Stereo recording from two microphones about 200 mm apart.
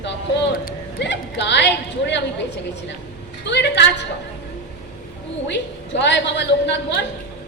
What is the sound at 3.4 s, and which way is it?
Speech, 60° left (ahead or behind).